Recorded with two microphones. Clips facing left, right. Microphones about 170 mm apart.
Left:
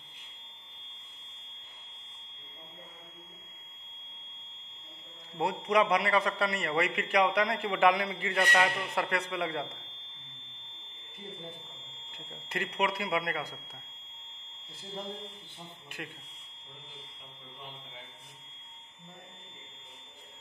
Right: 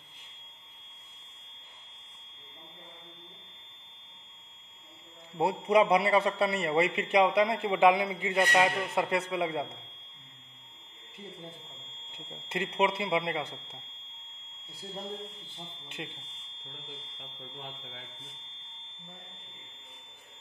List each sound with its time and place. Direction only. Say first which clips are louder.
5.4 s a man's voice: right 3 dB; 30° right (ahead or behind)
12.4 s a man's voice: right 3 dB; 25° right (ahead or behind)